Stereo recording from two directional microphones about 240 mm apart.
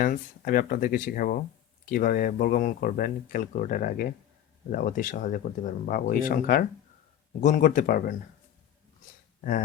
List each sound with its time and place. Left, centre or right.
0.0 s speech: left
9.4 s speech: left